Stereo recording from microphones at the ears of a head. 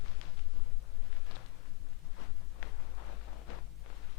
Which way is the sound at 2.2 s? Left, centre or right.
Left.